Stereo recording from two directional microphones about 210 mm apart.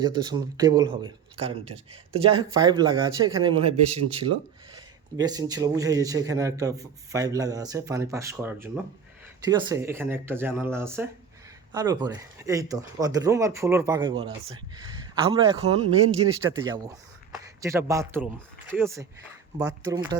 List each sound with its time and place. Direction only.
0.0 s a man's voice: 20° right (ahead or behind)
16.5 s a man's voice: 20° right (ahead or behind)